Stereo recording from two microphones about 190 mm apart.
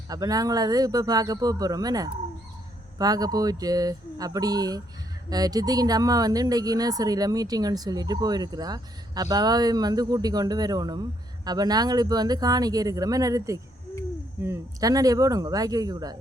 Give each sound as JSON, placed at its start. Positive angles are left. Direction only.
{"t": 0.1, "sound": "a woman's voice", "side_deg": -20}